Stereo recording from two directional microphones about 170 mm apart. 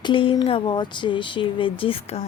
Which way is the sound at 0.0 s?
30° left (ahead or behind).